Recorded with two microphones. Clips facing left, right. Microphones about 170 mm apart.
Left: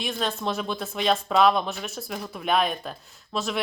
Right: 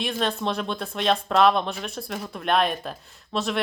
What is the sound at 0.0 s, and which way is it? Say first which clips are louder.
Speech: right 2 dB; centre (ahead or behind).